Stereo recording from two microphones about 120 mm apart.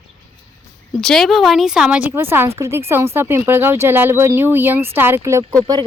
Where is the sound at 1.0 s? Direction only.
5° left (ahead or behind); by 5.4 s 25° right (ahead or behind).